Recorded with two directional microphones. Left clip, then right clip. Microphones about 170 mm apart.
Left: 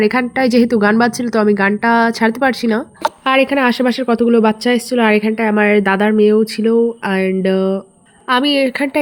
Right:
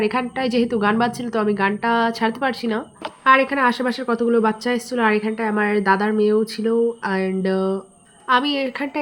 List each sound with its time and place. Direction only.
0.0 s a woman's voice: 35° left (ahead or behind)